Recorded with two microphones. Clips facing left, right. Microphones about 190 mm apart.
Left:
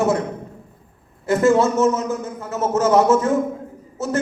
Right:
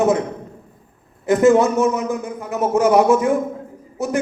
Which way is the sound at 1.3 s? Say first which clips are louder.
Right 2 dB; 20° right (ahead or behind).